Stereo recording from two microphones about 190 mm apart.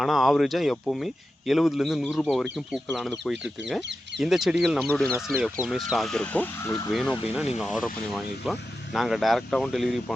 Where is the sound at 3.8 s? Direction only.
65° right (ahead or behind).